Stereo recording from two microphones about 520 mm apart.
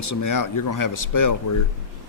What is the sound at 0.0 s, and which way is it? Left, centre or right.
Speech, left.